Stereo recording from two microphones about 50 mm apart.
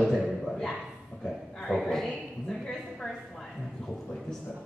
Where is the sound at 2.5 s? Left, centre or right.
Centre.